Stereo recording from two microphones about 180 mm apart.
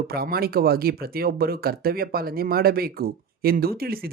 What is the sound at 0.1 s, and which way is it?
Speech, 60° right (ahead or behind).